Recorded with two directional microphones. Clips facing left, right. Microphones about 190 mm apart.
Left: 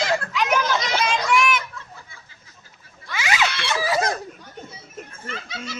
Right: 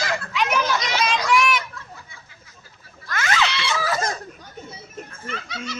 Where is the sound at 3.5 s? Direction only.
50° left (ahead or behind).